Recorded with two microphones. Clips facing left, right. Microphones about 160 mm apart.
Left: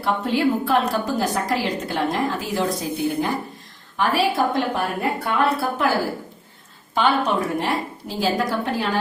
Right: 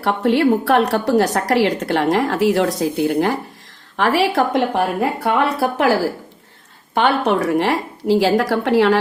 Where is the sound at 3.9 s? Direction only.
90° right.